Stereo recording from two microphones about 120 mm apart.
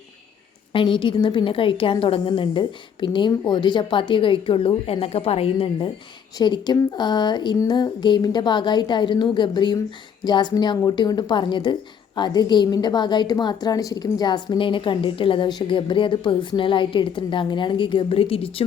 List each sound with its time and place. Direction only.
0.7 s a woman's voice: 45° left (ahead or behind)
6.4 s a woman's voice: 35° left (ahead or behind)